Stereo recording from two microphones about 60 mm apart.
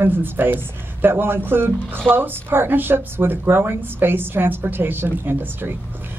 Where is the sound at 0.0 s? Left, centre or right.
Right.